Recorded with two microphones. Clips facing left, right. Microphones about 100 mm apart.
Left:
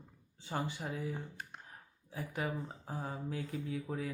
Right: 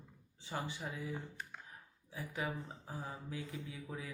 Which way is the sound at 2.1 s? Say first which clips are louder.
Left 3 dB; 45° left (ahead or behind).